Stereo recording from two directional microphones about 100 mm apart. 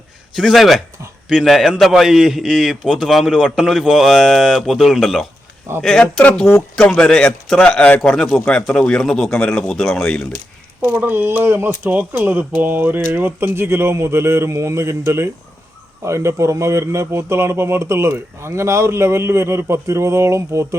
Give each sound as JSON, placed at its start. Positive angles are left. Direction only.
{"t": 0.3, "sound": "a man's voice", "side_deg": 0}
{"t": 10.8, "sound": "speech", "side_deg": -20}